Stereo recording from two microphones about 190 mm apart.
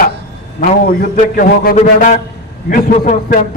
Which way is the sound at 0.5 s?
45° left (ahead or behind).